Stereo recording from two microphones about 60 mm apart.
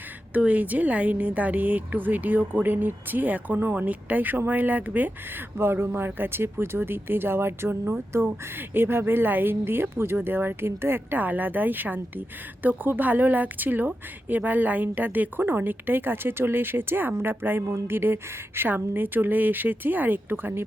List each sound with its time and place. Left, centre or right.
0.3 s speech: right
5.5 s a woman's voice: right